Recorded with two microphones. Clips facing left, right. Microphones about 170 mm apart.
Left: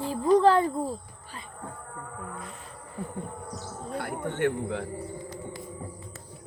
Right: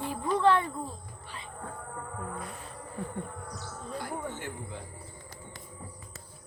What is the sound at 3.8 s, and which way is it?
Speech, 60° left (ahead or behind).